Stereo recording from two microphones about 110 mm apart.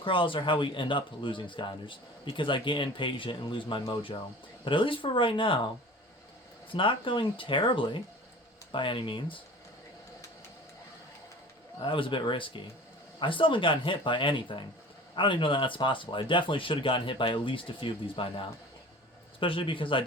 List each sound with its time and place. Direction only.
0.0 s speech: 50° left (ahead or behind)
6.7 s speech: 50° left (ahead or behind)
11.8 s speech: 50° left (ahead or behind)
19.4 s speech: 55° left (ahead or behind)